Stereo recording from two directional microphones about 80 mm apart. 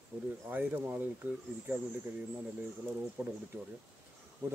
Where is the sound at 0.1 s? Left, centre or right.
Right.